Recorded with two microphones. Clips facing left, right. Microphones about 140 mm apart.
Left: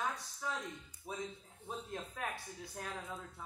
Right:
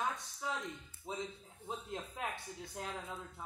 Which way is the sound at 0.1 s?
20° right (ahead or behind).